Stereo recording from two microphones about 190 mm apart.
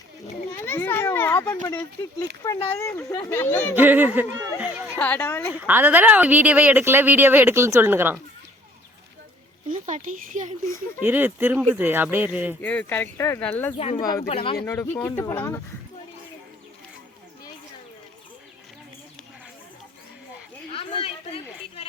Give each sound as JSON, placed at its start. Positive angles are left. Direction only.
{"t": 0.6, "sound": "a sound", "side_deg": 10}
{"t": 2.7, "sound": "speech", "side_deg": 15}
{"t": 3.8, "sound": "speech", "side_deg": -10}
{"t": 4.9, "sound": "speech", "side_deg": 10}
{"t": 5.5, "sound": "speech", "side_deg": -10}
{"t": 9.6, "sound": "speech", "side_deg": -40}
{"t": 11.0, "sound": "speech", "side_deg": -10}
{"t": 12.6, "sound": "speech", "side_deg": 10}
{"t": 13.7, "sound": "speech", "side_deg": 30}
{"t": 14.0, "sound": "speech", "side_deg": 20}
{"t": 14.3, "sound": "speech", "side_deg": 30}
{"t": 14.6, "sound": "speech", "side_deg": 15}
{"t": 20.7, "sound": "a sound", "side_deg": 30}